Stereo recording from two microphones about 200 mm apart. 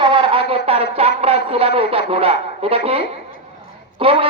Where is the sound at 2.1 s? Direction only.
30° right (ahead or behind).